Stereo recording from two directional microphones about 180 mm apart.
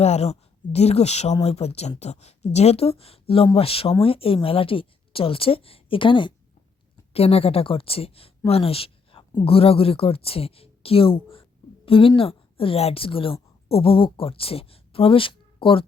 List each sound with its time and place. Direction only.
0.0 s a woman's voice: 35° left (ahead or behind)